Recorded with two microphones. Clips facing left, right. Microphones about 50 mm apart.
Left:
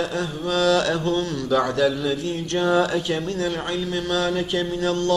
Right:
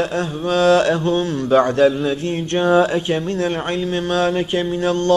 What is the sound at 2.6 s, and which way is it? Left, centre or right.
Mantra, right.